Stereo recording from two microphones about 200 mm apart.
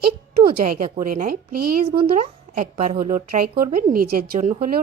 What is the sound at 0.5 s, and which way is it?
Speech, 40° right (ahead or behind).